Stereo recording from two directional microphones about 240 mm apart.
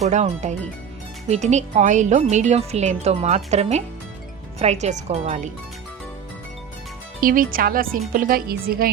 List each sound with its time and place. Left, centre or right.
0.0 s speech: right
7.2 s speech: right